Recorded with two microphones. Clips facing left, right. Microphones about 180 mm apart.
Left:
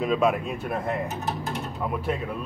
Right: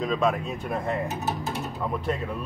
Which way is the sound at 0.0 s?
10° left (ahead or behind).